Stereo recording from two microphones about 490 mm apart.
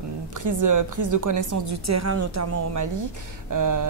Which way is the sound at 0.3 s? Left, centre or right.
Right.